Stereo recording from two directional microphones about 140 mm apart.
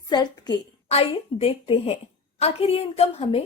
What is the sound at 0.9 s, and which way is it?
A woman's voice, 45° left (ahead or behind).